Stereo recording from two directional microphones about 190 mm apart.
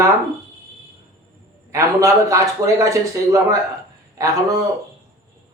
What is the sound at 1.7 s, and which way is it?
A man's voice, 15° right (ahead or behind).